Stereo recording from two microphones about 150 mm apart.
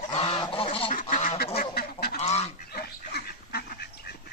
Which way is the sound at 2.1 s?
45° left (ahead or behind).